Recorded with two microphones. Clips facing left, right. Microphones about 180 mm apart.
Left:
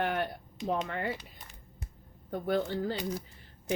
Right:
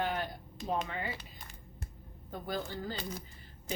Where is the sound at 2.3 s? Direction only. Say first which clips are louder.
Left 8 dB; 60° left (ahead or behind).